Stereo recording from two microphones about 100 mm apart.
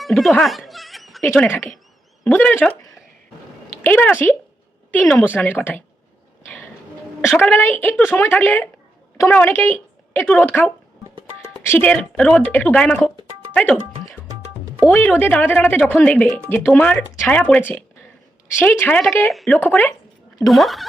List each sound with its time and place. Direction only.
0.0 s a sound: centre (ahead or behind)
1.4 s speech: 20° left (ahead or behind)
3.8 s speech: 20° left (ahead or behind)
7.3 s speech: 20° left (ahead or behind)
9.5 s a woman's voice: 25° left (ahead or behind)
11.9 s speech: 10° left (ahead or behind)
14.8 s speech: 15° left (ahead or behind)
20.5 s speech: centre (ahead or behind)